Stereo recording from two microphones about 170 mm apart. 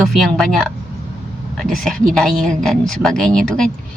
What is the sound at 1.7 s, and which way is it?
Speech, centre (ahead or behind).